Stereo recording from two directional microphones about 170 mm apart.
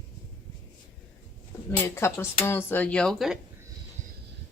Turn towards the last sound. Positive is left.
turn(degrees=0)  # may be behind; listen again after turning